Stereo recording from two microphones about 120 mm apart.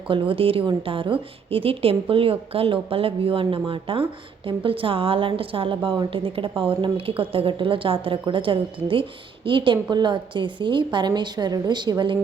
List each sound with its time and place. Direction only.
0.1 s a woman's voice: 50° right (ahead or behind)